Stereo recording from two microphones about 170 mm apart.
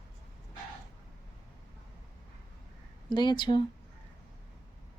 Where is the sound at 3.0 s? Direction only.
25° left (ahead or behind).